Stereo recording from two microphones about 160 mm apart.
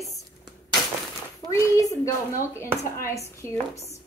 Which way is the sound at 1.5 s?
20° left (ahead or behind).